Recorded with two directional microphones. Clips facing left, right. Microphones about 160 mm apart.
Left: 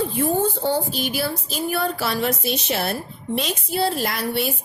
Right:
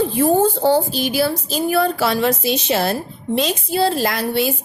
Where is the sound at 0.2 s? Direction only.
90° right.